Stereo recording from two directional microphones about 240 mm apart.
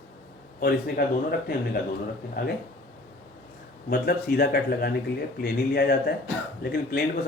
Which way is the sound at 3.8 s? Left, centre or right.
Left.